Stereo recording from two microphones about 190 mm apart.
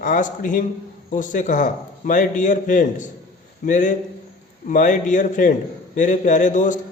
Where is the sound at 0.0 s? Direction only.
45° left (ahead or behind).